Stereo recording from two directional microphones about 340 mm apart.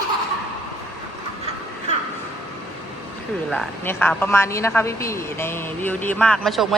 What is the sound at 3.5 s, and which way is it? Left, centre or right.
A woman's voice, centre.